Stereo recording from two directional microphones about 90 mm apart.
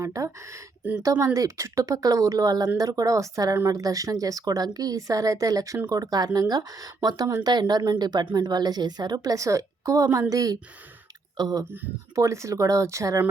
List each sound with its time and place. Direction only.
0.0 s speech: 35° right (ahead or behind)
12.1 s speech: 35° right (ahead or behind)